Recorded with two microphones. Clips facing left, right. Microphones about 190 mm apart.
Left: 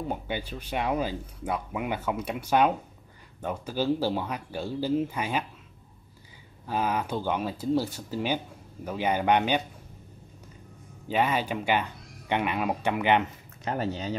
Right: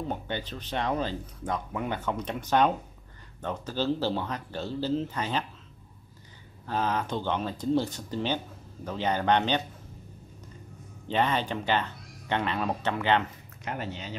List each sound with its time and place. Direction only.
0.1 s speech: 10° left (ahead or behind)
6.6 s speech: 10° left (ahead or behind)
11.1 s speech: 10° left (ahead or behind)
13.7 s speech: 35° left (ahead or behind)